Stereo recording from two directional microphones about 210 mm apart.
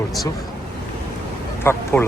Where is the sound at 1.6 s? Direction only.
10° left (ahead or behind).